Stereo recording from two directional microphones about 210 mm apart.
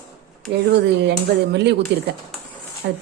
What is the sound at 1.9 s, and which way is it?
A woman's voice, 60° right (ahead or behind).